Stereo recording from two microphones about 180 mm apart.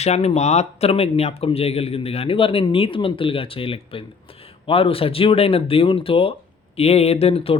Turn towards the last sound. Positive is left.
turn(degrees=35)  # may be behind; listen again after turning